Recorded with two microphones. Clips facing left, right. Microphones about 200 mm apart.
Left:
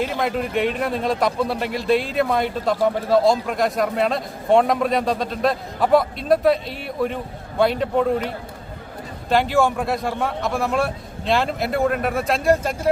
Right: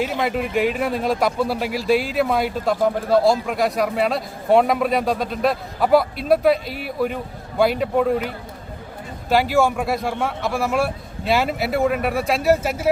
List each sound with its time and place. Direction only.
0.0 s speech: 5° right (ahead or behind)
9.3 s speech: centre (ahead or behind)